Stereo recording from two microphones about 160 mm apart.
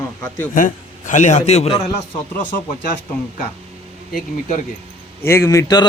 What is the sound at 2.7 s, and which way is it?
Speech, 50° left (ahead or behind).